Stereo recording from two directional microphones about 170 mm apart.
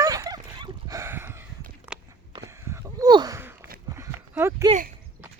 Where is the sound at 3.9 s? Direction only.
15° right (ahead or behind).